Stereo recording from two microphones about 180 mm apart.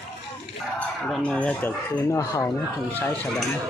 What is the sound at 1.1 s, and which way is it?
Speech, 5° left (ahead or behind).